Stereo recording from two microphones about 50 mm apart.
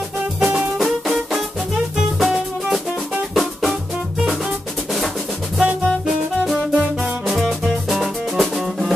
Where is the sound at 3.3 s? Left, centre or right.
Centre.